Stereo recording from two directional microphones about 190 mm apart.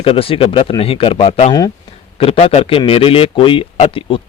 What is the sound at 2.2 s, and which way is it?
A man's voice, 30° left (ahead or behind).